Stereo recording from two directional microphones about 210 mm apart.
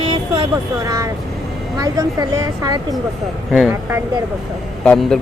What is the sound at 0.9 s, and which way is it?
A woman's voice, 15° right (ahead or behind).